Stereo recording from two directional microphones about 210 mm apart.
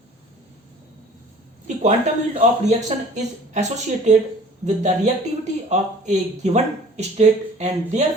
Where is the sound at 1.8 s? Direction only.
30° right (ahead or behind).